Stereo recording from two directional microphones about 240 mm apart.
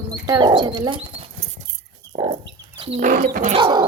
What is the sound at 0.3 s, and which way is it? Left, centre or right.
Speech, centre.